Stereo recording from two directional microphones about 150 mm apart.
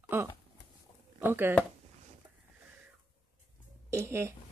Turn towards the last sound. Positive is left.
turn(degrees=-15)  # may be behind; listen again after turning